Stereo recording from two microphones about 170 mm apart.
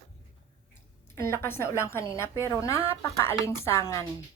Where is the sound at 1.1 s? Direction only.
15° left (ahead or behind).